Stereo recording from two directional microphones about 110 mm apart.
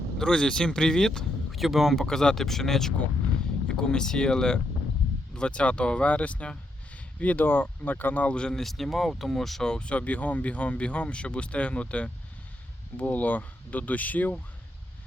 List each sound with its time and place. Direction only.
0.2 s speech: 5° left (ahead or behind)